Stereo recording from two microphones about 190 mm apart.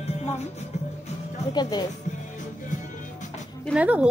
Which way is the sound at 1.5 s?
20° left (ahead or behind).